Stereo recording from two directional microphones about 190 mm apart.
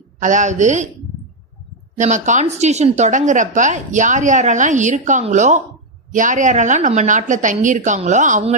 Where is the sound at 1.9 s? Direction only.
40° right (ahead or behind).